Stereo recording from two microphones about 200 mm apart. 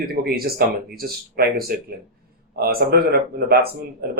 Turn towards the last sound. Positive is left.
turn(degrees=-50)  # may be behind; listen again after turning